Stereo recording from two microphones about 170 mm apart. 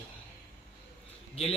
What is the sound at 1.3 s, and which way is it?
Speech, 35° left (ahead or behind).